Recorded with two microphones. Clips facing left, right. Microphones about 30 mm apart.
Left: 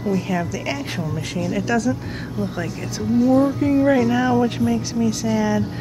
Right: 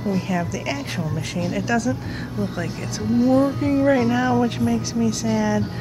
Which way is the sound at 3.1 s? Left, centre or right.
Centre.